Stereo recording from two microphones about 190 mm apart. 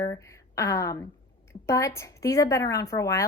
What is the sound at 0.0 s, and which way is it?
A woman's voice, 15° left (ahead or behind).